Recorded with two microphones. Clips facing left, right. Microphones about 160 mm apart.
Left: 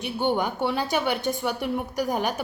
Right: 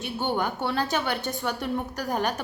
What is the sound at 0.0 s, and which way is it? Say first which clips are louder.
A woman's voice: left 3 dB; 15° left (ahead or behind).